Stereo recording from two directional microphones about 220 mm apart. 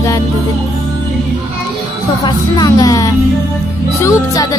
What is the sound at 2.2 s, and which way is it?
Speech, 20° left (ahead or behind).